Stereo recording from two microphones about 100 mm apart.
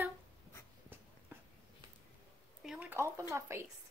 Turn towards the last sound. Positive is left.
turn(degrees=-25)  # may be behind; listen again after turning